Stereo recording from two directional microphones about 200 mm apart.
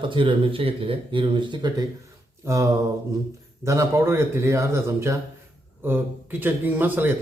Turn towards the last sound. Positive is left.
turn(degrees=-10)  # may be behind; listen again after turning